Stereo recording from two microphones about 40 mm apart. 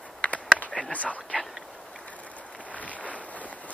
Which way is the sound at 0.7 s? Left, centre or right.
Left.